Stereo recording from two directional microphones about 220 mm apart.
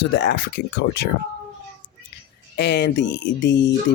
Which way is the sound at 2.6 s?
50° left (ahead or behind).